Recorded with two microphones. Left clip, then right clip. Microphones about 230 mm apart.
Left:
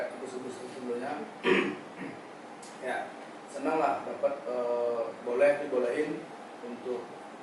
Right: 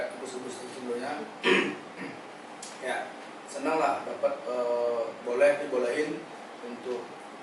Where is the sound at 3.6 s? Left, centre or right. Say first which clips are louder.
Right 2 dB; centre.